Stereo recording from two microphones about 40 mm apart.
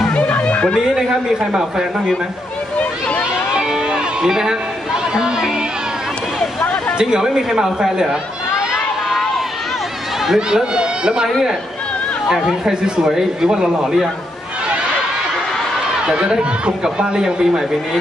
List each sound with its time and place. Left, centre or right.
0.1 s music: left
1.5 s speech: centre
3.5 s a sound: centre
5.1 s speech: centre
7.0 s speech: centre
10.2 s speech: centre
12.6 s speech: centre
16.0 s speech: right